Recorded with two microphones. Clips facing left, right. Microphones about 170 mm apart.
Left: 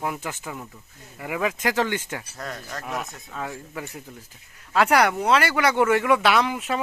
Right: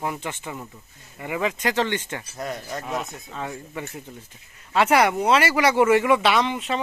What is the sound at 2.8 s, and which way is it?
Speech, centre (ahead or behind).